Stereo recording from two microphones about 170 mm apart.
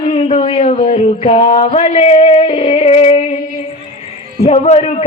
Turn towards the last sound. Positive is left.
turn(degrees=40)  # may be behind; listen again after turning